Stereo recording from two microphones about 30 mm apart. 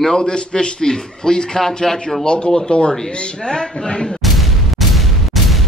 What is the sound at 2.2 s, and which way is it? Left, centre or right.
A man's voice, left.